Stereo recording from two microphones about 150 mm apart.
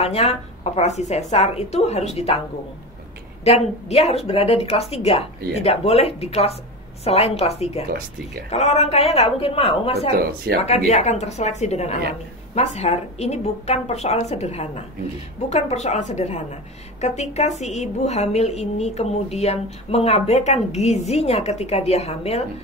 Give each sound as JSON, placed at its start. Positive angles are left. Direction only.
{"t": 0.0, "sound": "speech", "side_deg": 45}
{"t": 3.9, "sound": "speech", "side_deg": 45}